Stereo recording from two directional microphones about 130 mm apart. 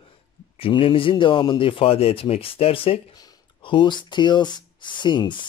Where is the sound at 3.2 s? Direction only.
35° left (ahead or behind).